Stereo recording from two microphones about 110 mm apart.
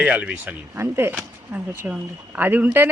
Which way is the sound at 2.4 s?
15° right (ahead or behind).